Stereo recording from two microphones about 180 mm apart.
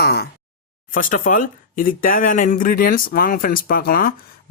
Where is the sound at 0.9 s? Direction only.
50° left (ahead or behind).